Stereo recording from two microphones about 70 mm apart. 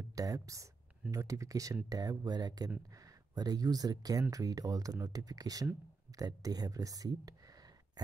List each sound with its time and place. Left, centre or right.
0.1 s speech: right
1.9 s speech: right